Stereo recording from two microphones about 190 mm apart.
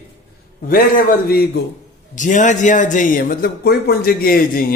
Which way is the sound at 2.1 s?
40° left (ahead or behind).